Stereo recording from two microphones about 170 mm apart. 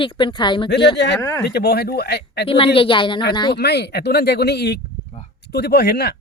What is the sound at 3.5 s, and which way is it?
Speech, 75° left (ahead or behind).